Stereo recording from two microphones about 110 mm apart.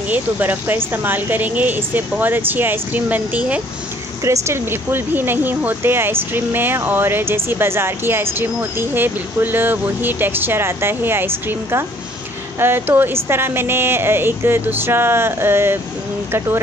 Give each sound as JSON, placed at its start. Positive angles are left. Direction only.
{"t": 0.1, "sound": "speech", "side_deg": -15}
{"t": 4.2, "sound": "speech", "side_deg": -25}